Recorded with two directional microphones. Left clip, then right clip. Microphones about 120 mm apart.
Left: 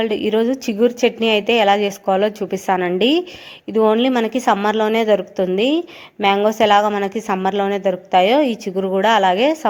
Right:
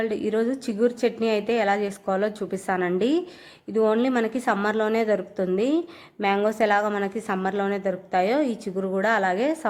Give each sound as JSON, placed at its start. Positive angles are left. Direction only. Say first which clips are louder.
{"t": 0.0, "sound": "a woman's voice", "louder": "left 7 dB", "side_deg": 25}